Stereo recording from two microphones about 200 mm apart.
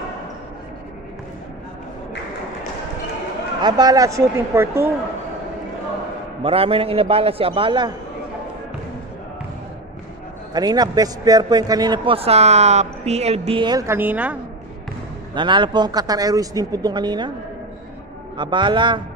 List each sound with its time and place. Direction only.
3.6 s speech: 20° right (ahead or behind)
6.4 s a man's voice: 30° right (ahead or behind)
10.5 s a man's voice: 20° right (ahead or behind)
15.3 s a man's voice: 25° right (ahead or behind)
18.4 s a man's voice: 25° right (ahead or behind)